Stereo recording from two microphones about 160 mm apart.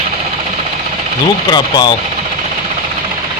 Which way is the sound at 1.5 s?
25° left (ahead or behind).